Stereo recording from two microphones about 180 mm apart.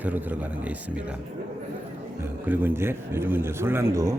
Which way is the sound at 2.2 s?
10° right (ahead or behind).